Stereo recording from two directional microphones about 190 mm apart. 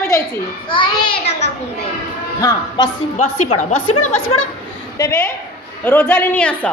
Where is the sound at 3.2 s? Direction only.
35° left (ahead or behind).